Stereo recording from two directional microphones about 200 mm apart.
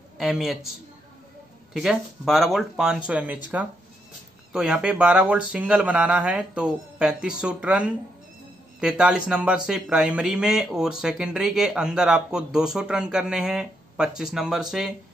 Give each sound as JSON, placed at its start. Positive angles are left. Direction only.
{"t": 0.2, "sound": "a man's voice", "side_deg": 0}
{"t": 1.7, "sound": "a man's voice", "side_deg": 0}
{"t": 4.5, "sound": "a man's voice", "side_deg": -5}